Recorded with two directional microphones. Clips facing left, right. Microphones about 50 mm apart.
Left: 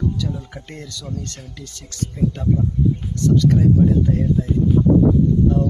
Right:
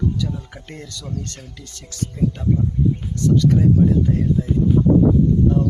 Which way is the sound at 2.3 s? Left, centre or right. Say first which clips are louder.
Even; centre.